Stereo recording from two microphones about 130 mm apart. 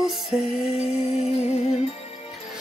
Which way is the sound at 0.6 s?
50° left (ahead or behind).